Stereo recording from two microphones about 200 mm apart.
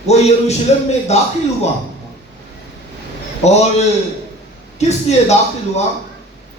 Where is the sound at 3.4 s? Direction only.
35° left (ahead or behind).